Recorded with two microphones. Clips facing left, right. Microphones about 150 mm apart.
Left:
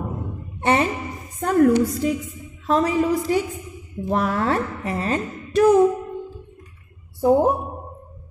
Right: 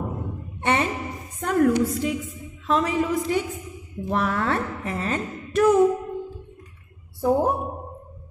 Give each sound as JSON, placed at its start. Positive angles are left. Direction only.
{"t": 0.6, "sound": "a sound", "side_deg": 35}
{"t": 1.4, "sound": "a woman's voice", "side_deg": 35}
{"t": 7.2, "sound": "a woman's voice", "side_deg": 30}